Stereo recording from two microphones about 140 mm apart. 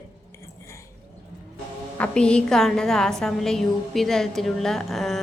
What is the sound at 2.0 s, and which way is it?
A woman's voice, 5° left (ahead or behind).